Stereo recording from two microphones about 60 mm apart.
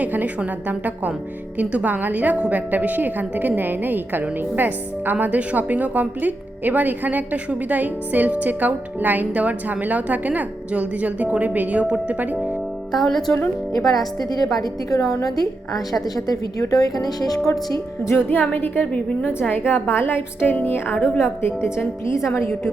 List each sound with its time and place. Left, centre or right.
0.0 s speech: right
12.9 s speech: centre
13.7 s a woman's voice: left
18.2 s a woman's voice: left